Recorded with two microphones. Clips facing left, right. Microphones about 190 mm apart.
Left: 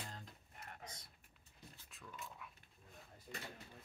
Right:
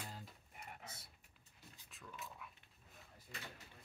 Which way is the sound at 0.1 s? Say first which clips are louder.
Right 1 dB; 5° right (ahead or behind).